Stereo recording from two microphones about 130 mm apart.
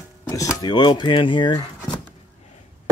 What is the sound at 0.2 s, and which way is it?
Speech, 25° left (ahead or behind).